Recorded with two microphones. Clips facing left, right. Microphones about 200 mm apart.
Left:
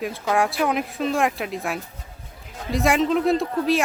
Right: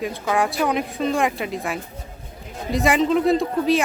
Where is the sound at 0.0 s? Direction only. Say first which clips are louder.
Even; centre (ahead or behind).